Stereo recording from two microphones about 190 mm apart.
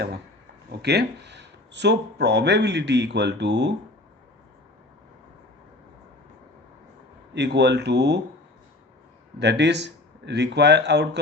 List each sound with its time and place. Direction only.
0.8 s speech: 60° right (ahead or behind)
7.3 s speech: 65° right (ahead or behind)
9.4 s speech: 65° right (ahead or behind)